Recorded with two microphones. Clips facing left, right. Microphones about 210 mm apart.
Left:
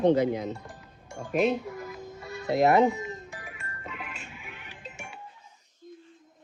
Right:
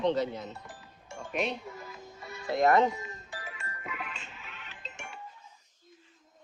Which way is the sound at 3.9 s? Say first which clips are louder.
Even; 5° left (ahead or behind).